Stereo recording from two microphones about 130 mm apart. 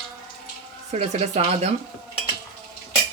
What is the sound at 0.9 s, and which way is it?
Speech, 60° right (ahead or behind).